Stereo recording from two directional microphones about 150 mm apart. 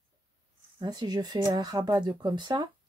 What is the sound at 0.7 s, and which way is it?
Speech, 30° right (ahead or behind).